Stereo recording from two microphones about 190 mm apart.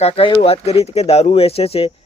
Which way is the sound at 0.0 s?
25° left (ahead or behind).